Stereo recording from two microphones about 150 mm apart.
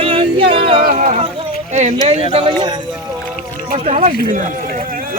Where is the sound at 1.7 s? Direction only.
50° right (ahead or behind).